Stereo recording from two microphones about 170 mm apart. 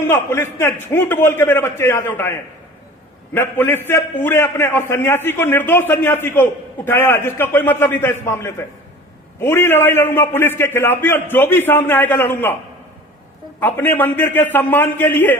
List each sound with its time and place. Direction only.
0.1 s a man's voice: 15° left (ahead or behind)
3.3 s a man's voice: 10° left (ahead or behind)
13.6 s a man's voice: 10° left (ahead or behind)